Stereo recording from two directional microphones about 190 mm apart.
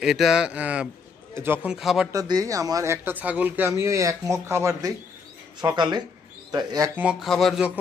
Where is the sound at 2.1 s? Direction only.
20° right (ahead or behind).